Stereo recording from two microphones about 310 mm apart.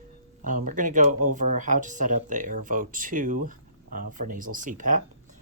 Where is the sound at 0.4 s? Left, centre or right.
Right.